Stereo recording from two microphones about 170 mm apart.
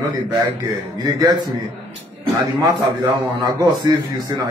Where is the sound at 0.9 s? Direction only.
25° right (ahead or behind).